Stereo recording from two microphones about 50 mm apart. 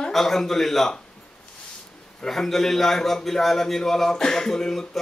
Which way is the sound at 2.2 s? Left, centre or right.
Centre.